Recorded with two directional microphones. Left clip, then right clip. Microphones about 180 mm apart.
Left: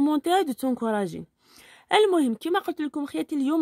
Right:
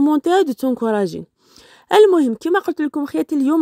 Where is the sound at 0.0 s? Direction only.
30° right (ahead or behind).